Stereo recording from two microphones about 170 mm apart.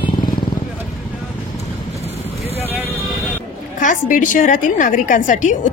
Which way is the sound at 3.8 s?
50° left (ahead or behind).